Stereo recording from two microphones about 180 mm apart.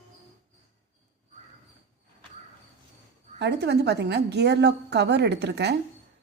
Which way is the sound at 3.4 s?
70° right (ahead or behind).